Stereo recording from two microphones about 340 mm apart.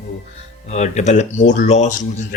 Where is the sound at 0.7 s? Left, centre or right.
Centre.